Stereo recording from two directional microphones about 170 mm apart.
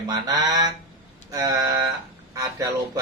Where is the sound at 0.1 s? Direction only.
25° right (ahead or behind).